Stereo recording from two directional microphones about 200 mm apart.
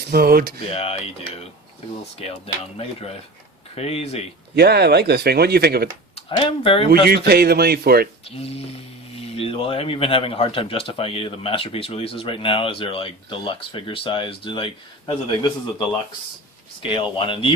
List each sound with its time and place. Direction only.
0.1 s speech: 50° right (ahead or behind)
0.7 s speech: 30° left (ahead or behind)
3.8 s speech: 30° left (ahead or behind)
4.5 s speech: 55° right (ahead or behind)
6.1 s speech: 25° left (ahead or behind)
6.9 s speech: 50° right (ahead or behind)
8.4 s speech: 30° left (ahead or behind)
16.8 s speech: 25° left (ahead or behind)